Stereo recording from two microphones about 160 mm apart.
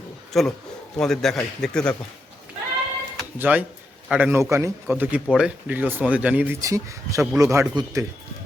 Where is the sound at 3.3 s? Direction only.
10° right (ahead or behind).